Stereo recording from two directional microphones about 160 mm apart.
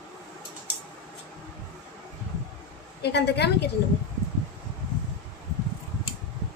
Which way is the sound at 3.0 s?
90° left.